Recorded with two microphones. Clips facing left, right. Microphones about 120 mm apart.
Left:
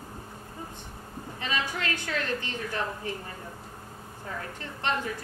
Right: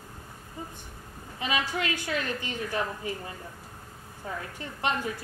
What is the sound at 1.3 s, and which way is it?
A woman's voice, 10° right (ahead or behind).